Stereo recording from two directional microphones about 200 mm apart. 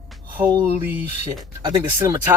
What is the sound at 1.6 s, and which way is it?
Speech, 15° right (ahead or behind).